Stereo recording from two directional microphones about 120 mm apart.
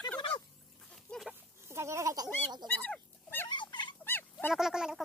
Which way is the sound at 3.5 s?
40° left (ahead or behind).